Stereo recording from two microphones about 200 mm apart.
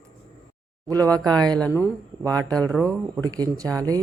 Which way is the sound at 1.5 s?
5° left (ahead or behind).